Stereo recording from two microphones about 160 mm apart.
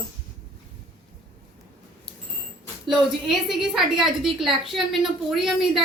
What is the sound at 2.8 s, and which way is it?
A woman's voice, centre (ahead or behind).